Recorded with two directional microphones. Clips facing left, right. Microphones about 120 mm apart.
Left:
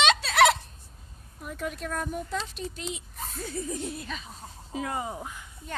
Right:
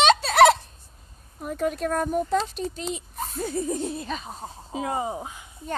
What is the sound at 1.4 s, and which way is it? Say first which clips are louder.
Speech: right 8 dB; 45° right (ahead or behind).